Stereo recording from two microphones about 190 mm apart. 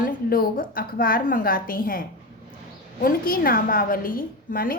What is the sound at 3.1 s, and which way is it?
A woman's voice, 50° left (ahead or behind).